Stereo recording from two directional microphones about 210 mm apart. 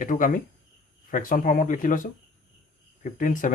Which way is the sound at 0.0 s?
40° left (ahead or behind).